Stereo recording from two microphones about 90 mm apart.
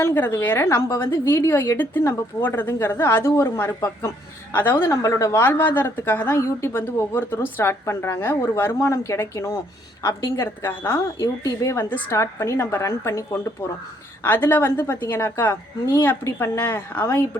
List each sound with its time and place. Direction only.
0.0 s a woman's voice: 30° left (ahead or behind)
4.5 s a woman's voice: 25° left (ahead or behind)